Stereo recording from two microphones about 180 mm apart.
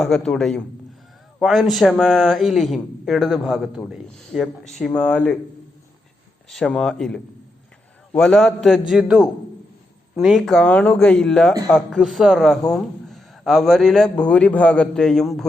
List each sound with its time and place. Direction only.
0.0 s a man's voice: 5° left (ahead or behind)
6.5 s a man's voice: 5° left (ahead or behind)